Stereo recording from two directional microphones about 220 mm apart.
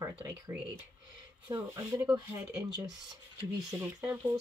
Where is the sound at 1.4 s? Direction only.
15° right (ahead or behind).